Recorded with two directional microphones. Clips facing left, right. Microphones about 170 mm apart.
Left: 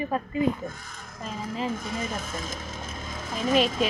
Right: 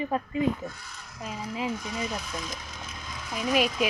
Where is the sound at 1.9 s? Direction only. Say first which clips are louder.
Left 1 dB; 50° left (ahead or behind).